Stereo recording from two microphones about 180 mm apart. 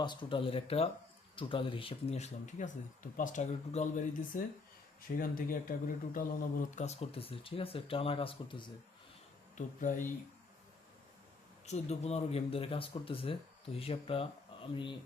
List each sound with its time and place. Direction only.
0.0 s speech: 25° left (ahead or behind)
9.6 s speech: 45° left (ahead or behind)
11.6 s speech: 40° left (ahead or behind)